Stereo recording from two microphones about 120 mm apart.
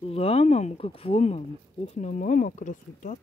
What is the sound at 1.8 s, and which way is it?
Speech, 80° left.